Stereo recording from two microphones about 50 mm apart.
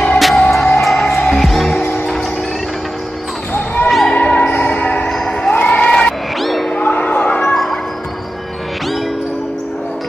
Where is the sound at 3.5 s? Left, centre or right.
Left.